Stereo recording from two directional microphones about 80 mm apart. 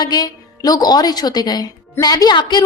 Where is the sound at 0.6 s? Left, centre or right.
Left.